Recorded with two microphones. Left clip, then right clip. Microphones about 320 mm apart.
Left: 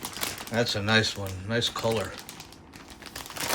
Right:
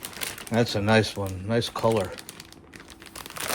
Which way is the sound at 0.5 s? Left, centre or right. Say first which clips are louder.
Right 2 dB; right.